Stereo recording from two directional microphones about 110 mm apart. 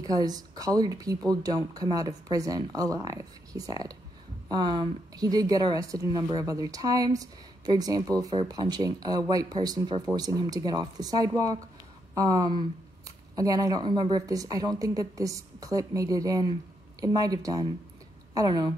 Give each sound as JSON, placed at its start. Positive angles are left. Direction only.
{"t": 0.1, "sound": "a woman's voice", "side_deg": -35}